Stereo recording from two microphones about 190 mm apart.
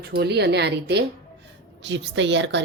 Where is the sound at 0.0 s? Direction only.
60° right (ahead or behind).